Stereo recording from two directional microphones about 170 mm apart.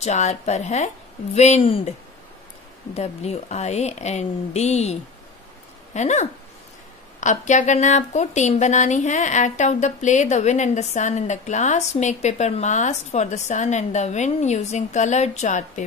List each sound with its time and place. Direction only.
0.0 s a woman's voice: 45° left (ahead or behind)
5.9 s a woman's voice: 45° left (ahead or behind)